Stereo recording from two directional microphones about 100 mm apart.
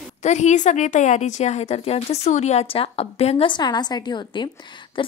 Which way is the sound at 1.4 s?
90° left.